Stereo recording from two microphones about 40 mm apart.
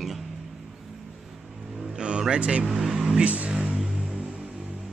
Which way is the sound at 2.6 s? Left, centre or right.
Centre.